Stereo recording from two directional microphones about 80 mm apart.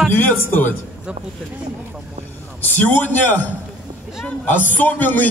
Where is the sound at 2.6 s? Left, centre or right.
Left.